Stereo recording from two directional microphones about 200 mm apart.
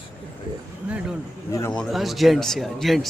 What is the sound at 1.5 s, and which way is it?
Speech, 15° left (ahead or behind).